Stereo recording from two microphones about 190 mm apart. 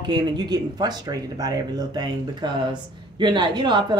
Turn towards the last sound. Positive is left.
turn(degrees=-25)  # may be behind; listen again after turning